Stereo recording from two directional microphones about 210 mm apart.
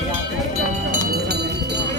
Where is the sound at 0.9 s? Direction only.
50° right (ahead or behind).